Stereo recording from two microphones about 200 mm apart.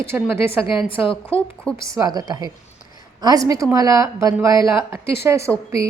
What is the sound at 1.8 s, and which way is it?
A woman's voice, 15° right (ahead or behind).